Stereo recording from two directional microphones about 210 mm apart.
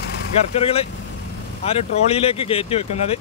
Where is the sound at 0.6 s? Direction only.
25° left (ahead or behind).